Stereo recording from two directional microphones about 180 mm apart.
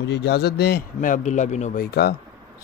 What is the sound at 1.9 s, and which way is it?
Speech, 60° left (ahead or behind).